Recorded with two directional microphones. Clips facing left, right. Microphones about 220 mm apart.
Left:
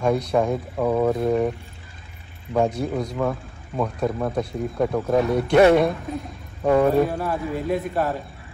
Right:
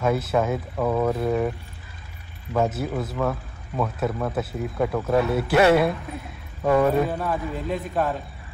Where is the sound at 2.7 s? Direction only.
5° right (ahead or behind).